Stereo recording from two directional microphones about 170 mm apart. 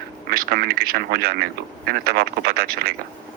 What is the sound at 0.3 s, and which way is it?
Speech, 65° right (ahead or behind).